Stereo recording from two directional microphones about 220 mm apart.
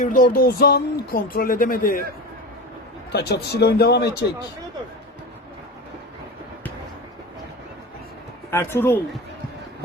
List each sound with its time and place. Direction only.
0.0 s speech: 40° left (ahead or behind)
3.1 s a man's voice: 50° left (ahead or behind)
8.4 s speech: 10° left (ahead or behind)